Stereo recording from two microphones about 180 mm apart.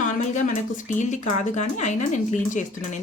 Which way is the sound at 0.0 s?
45° left (ahead or behind).